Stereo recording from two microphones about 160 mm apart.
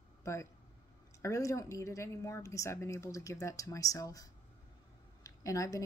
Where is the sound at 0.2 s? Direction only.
15° left (ahead or behind).